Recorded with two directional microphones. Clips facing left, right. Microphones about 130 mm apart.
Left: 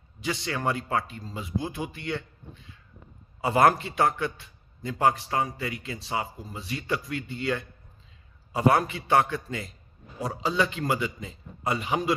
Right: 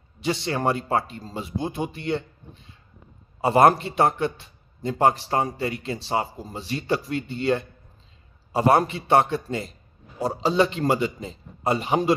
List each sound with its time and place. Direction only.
0.2 s a man's voice: 25° right (ahead or behind)
3.3 s a man's voice: 30° right (ahead or behind)